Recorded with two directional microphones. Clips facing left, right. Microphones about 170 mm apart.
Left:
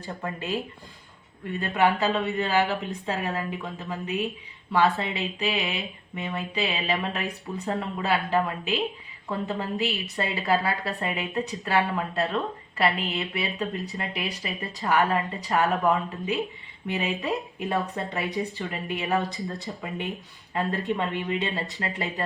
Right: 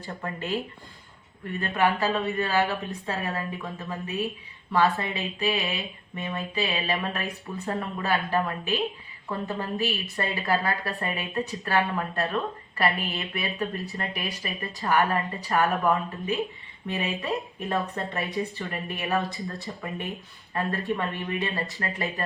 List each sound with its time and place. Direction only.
0.3 s a woman's voice: 15° left (ahead or behind)
1.6 s a woman's voice: 20° left (ahead or behind)